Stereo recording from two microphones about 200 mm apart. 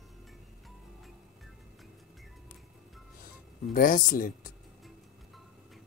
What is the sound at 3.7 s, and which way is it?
Speech, 45° left (ahead or behind).